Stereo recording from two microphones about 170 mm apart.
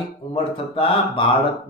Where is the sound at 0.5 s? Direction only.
30° left (ahead or behind).